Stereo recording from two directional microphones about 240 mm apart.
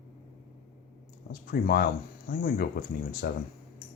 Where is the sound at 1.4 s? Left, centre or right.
Left.